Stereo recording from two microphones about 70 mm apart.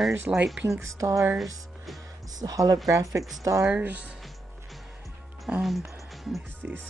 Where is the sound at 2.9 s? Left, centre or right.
Right.